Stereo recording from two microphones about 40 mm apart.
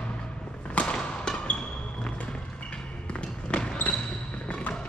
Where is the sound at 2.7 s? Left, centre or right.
Left.